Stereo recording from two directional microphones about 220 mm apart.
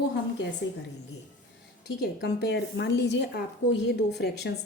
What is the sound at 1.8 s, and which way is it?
A woman's voice, 50° left (ahead or behind).